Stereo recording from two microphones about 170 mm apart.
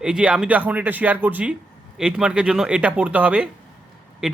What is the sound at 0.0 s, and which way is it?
Speech, 5° right (ahead or behind).